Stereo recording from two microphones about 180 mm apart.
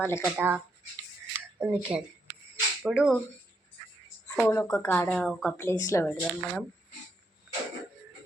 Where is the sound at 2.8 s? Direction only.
5° right (ahead or behind).